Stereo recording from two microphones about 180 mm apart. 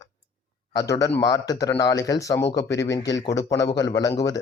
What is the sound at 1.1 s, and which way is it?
A man's voice, 20° left (ahead or behind).